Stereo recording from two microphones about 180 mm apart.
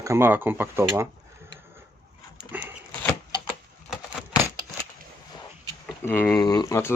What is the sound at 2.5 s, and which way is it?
Dog, 10° right (ahead or behind).